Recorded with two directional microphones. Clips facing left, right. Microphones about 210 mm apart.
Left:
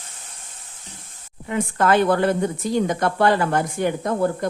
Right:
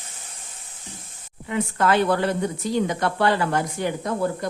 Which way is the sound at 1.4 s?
45° left (ahead or behind).